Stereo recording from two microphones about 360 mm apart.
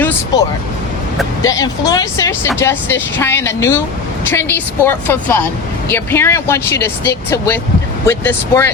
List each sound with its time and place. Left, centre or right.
1.5 s a woman's voice: centre